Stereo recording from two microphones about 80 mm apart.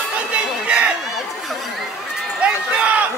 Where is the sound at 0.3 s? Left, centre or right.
Centre.